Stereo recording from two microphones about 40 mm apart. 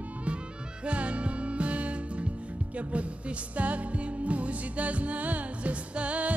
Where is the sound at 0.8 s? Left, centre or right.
Right.